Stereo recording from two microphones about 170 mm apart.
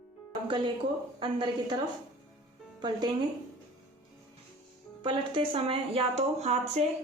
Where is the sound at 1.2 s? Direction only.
25° right (ahead or behind).